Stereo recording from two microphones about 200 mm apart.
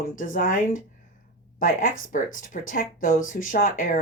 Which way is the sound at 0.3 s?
45° left (ahead or behind).